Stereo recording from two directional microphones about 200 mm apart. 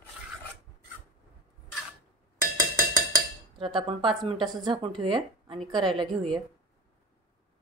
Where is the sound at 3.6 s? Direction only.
25° right (ahead or behind).